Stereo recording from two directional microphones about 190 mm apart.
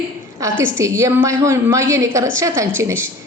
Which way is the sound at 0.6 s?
15° right (ahead or behind).